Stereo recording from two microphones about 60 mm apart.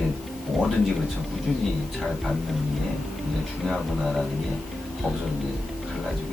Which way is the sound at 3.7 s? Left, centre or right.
Centre.